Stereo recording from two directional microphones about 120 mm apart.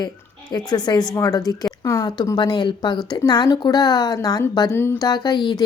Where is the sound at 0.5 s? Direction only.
35° left (ahead or behind).